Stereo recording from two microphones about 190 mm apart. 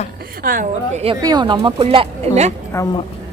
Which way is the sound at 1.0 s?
20° right (ahead or behind).